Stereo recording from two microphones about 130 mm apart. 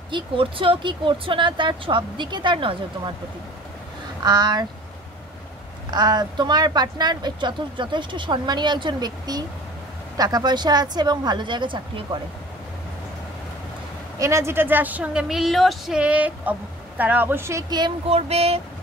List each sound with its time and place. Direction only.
0.1 s speech: 45° right (ahead or behind)
4.2 s speech: 30° right (ahead or behind)
5.9 s speech: 35° right (ahead or behind)
14.1 s a woman's voice: 25° right (ahead or behind)
18.0 s a sound: 50° right (ahead or behind)